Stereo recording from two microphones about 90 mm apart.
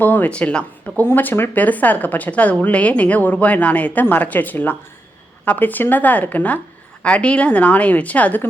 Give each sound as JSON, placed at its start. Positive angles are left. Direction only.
{"t": 0.0, "sound": "a woman's voice", "side_deg": 20}